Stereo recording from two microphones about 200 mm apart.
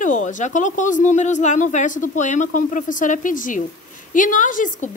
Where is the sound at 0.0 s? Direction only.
40° left (ahead or behind).